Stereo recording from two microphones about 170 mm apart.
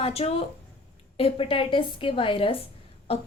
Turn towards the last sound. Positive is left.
turn(degrees=35)  # may be behind; listen again after turning